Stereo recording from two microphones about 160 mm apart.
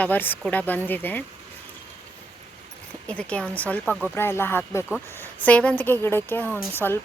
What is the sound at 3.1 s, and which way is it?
Speech, 5° left (ahead or behind).